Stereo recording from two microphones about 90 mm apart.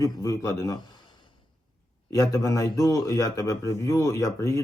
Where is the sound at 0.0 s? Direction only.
40° left (ahead or behind).